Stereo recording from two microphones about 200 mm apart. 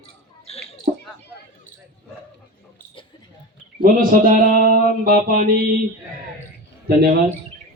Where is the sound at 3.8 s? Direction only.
45° right (ahead or behind).